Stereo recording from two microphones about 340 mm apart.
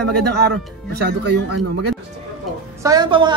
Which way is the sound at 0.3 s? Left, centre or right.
Right.